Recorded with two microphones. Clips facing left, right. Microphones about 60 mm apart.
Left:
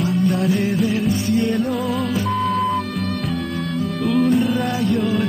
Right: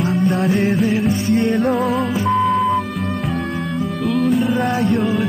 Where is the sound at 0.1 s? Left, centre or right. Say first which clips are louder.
Right 1 dB; right.